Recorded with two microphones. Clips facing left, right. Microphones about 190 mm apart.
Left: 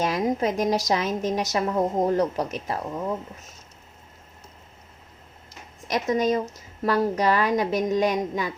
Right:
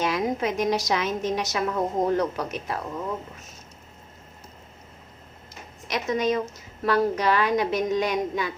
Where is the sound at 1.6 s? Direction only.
30° left (ahead or behind).